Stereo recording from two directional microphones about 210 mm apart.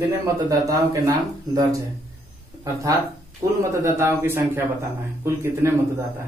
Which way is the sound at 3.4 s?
15° right (ahead or behind).